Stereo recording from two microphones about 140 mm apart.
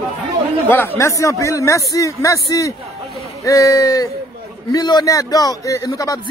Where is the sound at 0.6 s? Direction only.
15° left (ahead or behind).